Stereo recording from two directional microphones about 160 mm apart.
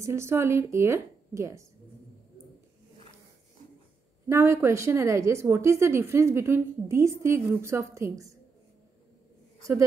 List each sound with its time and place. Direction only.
0.0 s a woman's voice: 15° right (ahead or behind)
4.3 s a woman's voice: 15° right (ahead or behind)
9.6 s a woman's voice: 20° right (ahead or behind)